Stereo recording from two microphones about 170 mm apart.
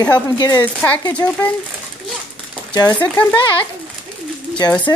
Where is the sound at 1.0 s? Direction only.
25° left (ahead or behind).